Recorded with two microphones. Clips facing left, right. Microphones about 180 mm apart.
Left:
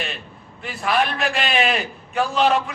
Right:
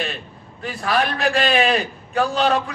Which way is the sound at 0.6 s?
35° right (ahead or behind).